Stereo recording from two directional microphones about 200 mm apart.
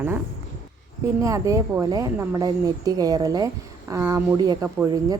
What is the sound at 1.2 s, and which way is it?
Speech, 15° right (ahead or behind).